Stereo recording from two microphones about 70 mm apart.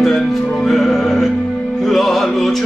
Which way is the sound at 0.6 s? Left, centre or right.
Centre.